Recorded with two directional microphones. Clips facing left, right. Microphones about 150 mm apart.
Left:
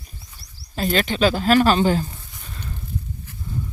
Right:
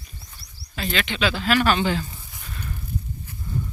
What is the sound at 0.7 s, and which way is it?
Speech, 40° left (ahead or behind).